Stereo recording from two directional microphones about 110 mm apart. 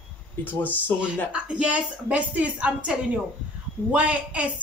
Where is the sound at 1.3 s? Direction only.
10° right (ahead or behind).